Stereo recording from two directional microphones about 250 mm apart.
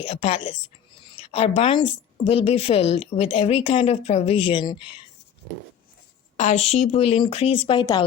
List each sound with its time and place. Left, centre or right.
0.0 s a woman's voice: left
6.3 s a woman's voice: left